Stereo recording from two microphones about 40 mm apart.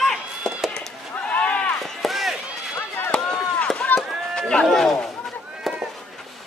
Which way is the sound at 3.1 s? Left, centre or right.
Centre.